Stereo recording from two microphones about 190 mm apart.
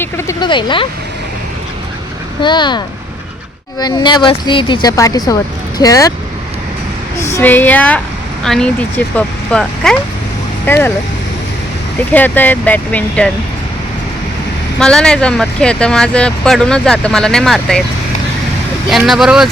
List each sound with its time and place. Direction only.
0.0 s speech: 15° left (ahead or behind)
2.4 s speech: 25° left (ahead or behind)
7.3 s speech: 10° left (ahead or behind)
12.1 s speech: 10° left (ahead or behind)
14.8 s speech: 5° left (ahead or behind)
18.9 s speech: centre (ahead or behind)